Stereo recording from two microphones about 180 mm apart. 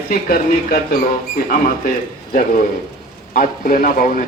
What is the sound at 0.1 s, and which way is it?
Speech, 55° left (ahead or behind).